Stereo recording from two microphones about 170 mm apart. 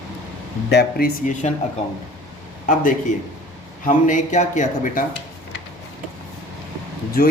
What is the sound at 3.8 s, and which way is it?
A man's voice, 50° left (ahead or behind).